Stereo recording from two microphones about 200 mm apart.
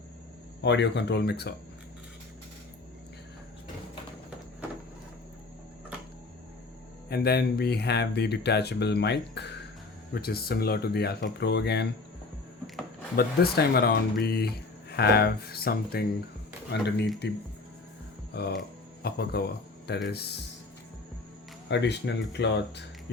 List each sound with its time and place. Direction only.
0.6 s speech: 60° left (ahead or behind)
7.1 s speech: 50° left (ahead or behind)
13.1 s speech: 50° left (ahead or behind)
18.3 s speech: 55° left (ahead or behind)
21.7 s speech: 60° left (ahead or behind)